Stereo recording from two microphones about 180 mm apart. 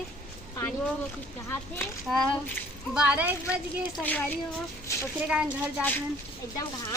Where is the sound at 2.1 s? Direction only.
Centre (ahead or behind).